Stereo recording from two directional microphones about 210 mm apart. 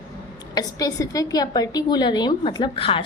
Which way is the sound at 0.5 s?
15° left (ahead or behind).